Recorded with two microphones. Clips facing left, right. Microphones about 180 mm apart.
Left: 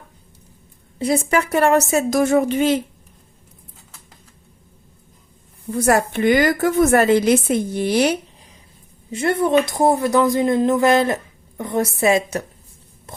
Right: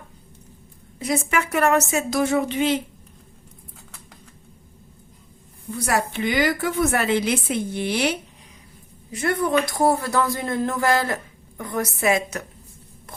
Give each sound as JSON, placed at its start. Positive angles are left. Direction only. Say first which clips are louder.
{"t": 0.9, "sound": "a woman's voice", "louder": "left 5 dB", "side_deg": 30}
{"t": 5.7, "sound": "a woman's voice", "louder": "left 7 dB", "side_deg": 50}
{"t": 9.1, "sound": "a woman's voice", "louder": "left 4 dB", "side_deg": 25}